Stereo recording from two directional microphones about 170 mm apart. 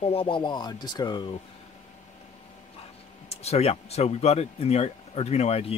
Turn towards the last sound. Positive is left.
turn(degrees=35)  # may be behind; listen again after turning